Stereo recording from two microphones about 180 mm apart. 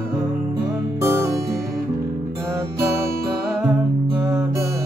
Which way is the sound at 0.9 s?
15° right (ahead or behind).